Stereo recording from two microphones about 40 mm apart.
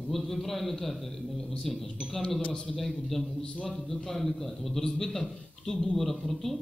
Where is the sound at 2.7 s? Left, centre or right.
Centre.